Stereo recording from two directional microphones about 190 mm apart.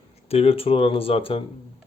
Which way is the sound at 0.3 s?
30° left (ahead or behind).